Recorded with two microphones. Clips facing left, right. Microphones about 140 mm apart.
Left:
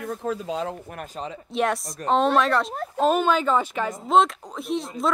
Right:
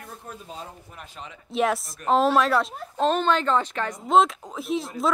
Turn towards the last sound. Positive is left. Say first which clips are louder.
# even
turn(degrees=0)  # may be behind; listen again after turning